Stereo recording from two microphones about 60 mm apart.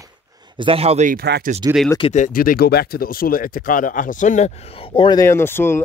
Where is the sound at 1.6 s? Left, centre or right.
Right.